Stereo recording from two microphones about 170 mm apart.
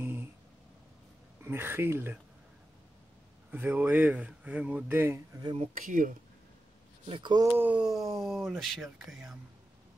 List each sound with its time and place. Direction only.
1.4 s speech: 15° right (ahead or behind)
3.5 s speech: 10° right (ahead or behind)
5.6 s speech: 50° right (ahead or behind)
7.1 s speech: 30° right (ahead or behind)
7.5 s speech: 10° right (ahead or behind)